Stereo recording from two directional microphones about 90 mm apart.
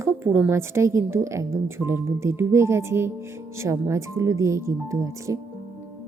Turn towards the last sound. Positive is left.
turn(degrees=-35)  # may be behind; listen again after turning